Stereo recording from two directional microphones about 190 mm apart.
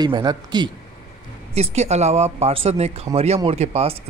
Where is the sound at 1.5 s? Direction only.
35° right (ahead or behind).